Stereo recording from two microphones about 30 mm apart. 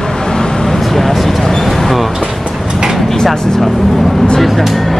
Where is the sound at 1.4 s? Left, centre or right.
Centre.